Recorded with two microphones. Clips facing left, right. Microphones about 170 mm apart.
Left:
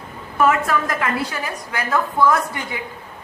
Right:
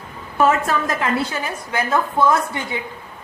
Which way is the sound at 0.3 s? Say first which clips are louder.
Even; 25° right (ahead or behind).